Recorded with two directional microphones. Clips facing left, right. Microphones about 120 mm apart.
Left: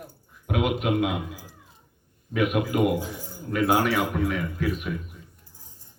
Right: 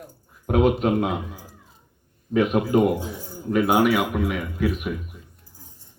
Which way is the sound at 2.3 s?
30° right (ahead or behind).